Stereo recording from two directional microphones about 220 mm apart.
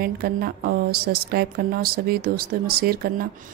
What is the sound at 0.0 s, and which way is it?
Speech, 45° right (ahead or behind).